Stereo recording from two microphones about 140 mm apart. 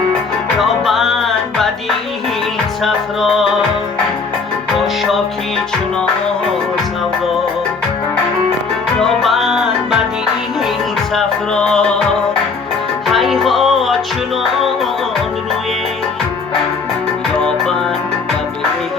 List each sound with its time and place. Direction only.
0.6 s music: centre (ahead or behind)
2.8 s music: centre (ahead or behind)
9.0 s music: centre (ahead or behind)
11.1 s music: 5° left (ahead or behind)
13.1 s music: centre (ahead or behind)